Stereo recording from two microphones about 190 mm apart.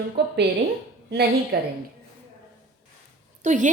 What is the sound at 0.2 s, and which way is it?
Speech, 65° right (ahead or behind).